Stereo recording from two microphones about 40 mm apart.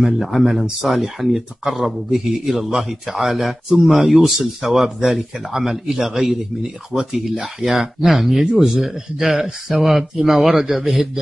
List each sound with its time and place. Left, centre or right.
0.0 s speech: centre